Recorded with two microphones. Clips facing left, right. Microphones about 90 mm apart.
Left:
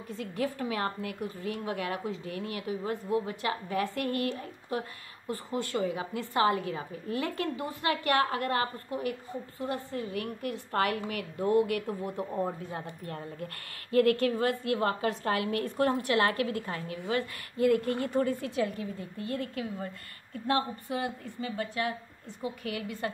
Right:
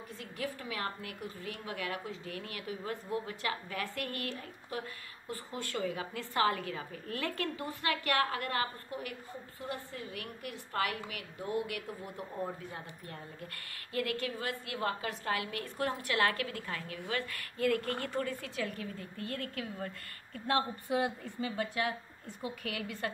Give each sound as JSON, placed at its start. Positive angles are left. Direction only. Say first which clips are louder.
{"t": 0.2, "sound": "a woman's voice", "louder": "left 8 dB", "side_deg": 35}
{"t": 13.0, "sound": "a woman's voice", "louder": "left 7 dB", "side_deg": 45}
{"t": 16.0, "sound": "speech", "louder": "left 4 dB", "side_deg": 25}
{"t": 17.0, "sound": "a woman's voice", "louder": "left 7 dB", "side_deg": 20}
{"t": 20.9, "sound": "a woman's voice", "louder": "right 2 dB", "side_deg": -10}
{"t": 22.6, "sound": "a woman's voice", "louder": "left 3 dB", "side_deg": 5}